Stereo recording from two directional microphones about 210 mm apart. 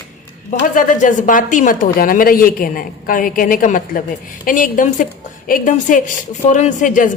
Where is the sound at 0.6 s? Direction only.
40° left (ahead or behind).